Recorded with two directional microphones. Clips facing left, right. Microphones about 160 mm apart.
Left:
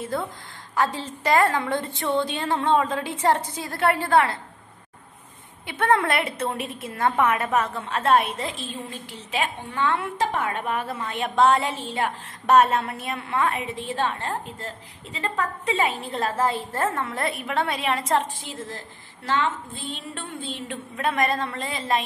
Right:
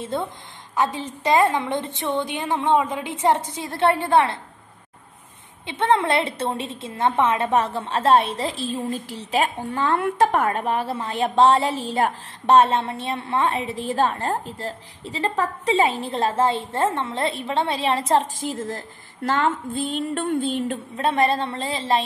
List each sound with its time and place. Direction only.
0.0 s a woman's voice: 25° right (ahead or behind)
5.7 s a woman's voice: 25° right (ahead or behind); by 10.0 s 40° right (ahead or behind)
10.0 s a woman's voice: 55° right (ahead or behind)
10.6 s a woman's voice: 30° right (ahead or behind)
12.4 s a woman's voice: 30° right (ahead or behind); by 20.8 s 45° right (ahead or behind)
20.9 s a woman's voice: 30° right (ahead or behind)